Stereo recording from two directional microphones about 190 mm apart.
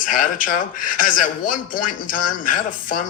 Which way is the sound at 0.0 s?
45° left (ahead or behind).